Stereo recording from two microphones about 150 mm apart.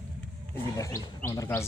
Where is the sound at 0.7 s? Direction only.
20° left (ahead or behind).